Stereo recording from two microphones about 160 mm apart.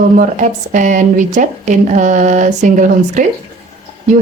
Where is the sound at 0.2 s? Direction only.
55° right (ahead or behind).